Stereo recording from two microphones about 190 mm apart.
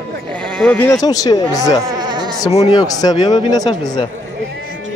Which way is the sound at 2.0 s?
20° right (ahead or behind).